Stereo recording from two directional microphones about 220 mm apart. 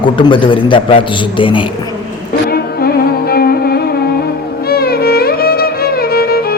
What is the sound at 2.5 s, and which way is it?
Music, 45° left (ahead or behind).